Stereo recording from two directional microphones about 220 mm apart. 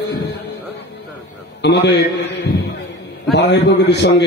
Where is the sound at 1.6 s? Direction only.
50° left (ahead or behind).